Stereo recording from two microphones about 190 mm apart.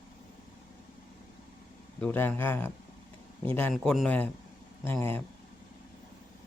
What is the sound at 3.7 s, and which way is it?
A man's voice, centre (ahead or behind).